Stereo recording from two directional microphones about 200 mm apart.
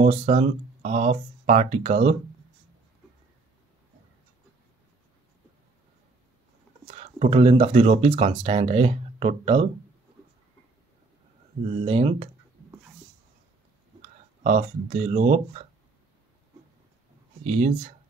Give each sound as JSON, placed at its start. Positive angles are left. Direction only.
{"t": 0.0, "sound": "speech", "side_deg": -35}
{"t": 6.9, "sound": "speech", "side_deg": -35}
{"t": 11.8, "sound": "speech", "side_deg": -30}
{"t": 14.0, "sound": "speech", "side_deg": -35}
{"t": 17.5, "sound": "speech", "side_deg": -35}